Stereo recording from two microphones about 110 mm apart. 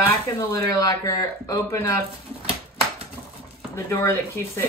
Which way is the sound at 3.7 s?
25° left (ahead or behind).